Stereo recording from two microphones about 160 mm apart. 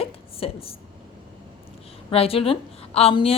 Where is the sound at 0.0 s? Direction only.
35° left (ahead or behind).